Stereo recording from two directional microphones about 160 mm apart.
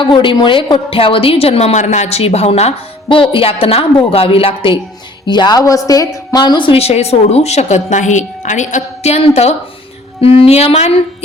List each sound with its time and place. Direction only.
0.0 s a woman's voice: 30° left (ahead or behind)